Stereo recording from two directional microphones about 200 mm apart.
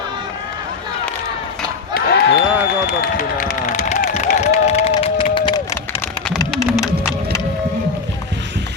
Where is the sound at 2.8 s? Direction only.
40° left (ahead or behind).